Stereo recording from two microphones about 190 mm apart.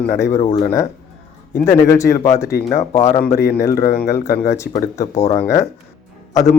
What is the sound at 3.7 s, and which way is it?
Speech, 50° left (ahead or behind).